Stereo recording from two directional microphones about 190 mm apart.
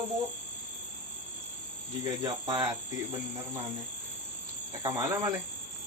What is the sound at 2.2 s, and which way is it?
Speech, 25° right (ahead or behind).